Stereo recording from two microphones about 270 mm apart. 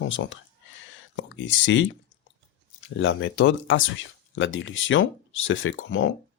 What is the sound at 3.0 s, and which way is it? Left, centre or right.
Speech, left.